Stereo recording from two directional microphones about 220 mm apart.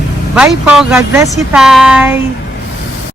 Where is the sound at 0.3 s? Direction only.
5° right (ahead or behind).